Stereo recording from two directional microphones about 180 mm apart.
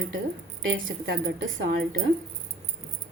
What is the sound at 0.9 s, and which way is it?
Speech, 90° right.